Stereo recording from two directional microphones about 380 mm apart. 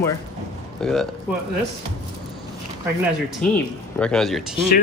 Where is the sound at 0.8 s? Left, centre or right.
Centre.